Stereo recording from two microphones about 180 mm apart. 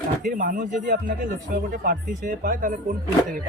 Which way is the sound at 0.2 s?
45° right (ahead or behind).